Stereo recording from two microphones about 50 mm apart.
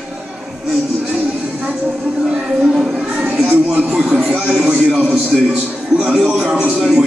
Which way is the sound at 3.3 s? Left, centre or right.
Right.